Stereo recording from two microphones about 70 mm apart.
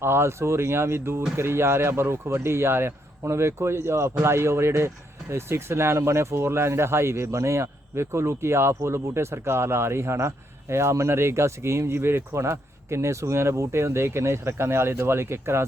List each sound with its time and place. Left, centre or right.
0.0 s speech: right